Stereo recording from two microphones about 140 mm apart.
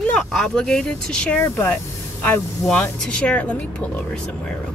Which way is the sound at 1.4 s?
15° left (ahead or behind).